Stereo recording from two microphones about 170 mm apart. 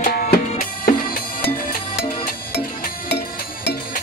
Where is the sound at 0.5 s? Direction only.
55° left (ahead or behind).